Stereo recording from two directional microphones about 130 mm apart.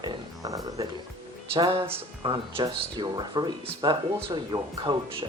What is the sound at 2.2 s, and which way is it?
Speech, 35° right (ahead or behind).